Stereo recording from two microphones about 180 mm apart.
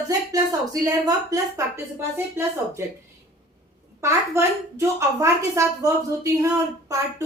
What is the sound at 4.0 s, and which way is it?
A woman's voice, 15° right (ahead or behind).